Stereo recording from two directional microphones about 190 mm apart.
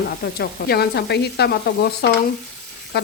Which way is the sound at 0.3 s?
55° left (ahead or behind).